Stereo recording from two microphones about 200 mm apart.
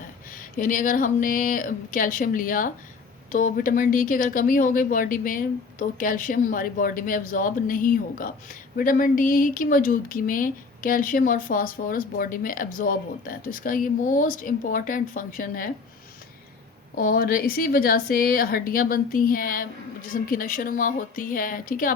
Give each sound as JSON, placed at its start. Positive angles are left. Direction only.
{"t": 0.3, "sound": "speech", "side_deg": 40}
{"t": 17.0, "sound": "speech", "side_deg": 45}